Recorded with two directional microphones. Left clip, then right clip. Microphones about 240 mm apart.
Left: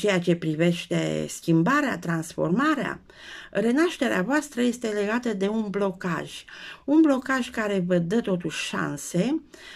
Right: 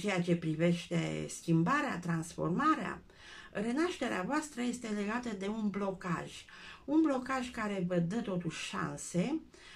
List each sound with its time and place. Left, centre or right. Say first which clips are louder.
0.0 s speech: left 11 dB; left